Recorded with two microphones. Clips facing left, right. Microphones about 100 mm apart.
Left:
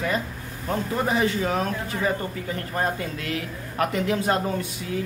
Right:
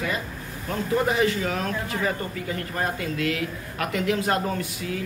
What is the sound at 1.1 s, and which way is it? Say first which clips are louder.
Speech: left 1 dB; 30° left (ahead or behind).